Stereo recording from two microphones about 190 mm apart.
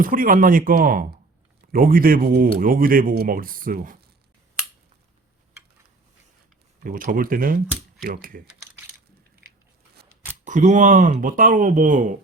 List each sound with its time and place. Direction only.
0.0 s speech: 45° right (ahead or behind)
6.8 s speech: 45° right (ahead or behind)
10.4 s speech: 40° right (ahead or behind)